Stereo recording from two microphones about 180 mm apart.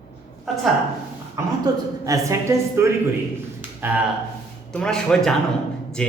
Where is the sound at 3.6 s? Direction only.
10° right (ahead or behind).